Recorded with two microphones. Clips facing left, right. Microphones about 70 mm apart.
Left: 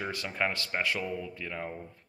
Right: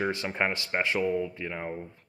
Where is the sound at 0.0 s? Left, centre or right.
Right.